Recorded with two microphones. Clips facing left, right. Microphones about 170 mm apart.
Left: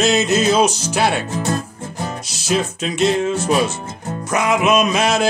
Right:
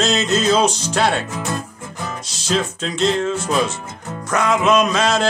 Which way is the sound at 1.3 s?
35° left (ahead or behind).